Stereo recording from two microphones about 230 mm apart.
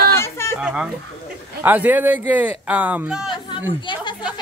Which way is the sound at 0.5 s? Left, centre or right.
Centre.